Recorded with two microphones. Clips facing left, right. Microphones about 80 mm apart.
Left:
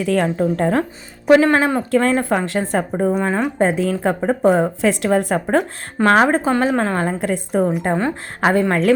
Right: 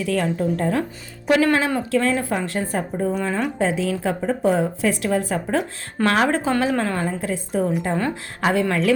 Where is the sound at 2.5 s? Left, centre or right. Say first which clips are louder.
Left 5 dB; left.